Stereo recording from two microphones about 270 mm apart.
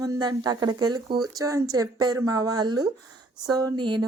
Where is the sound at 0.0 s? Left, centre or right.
Centre.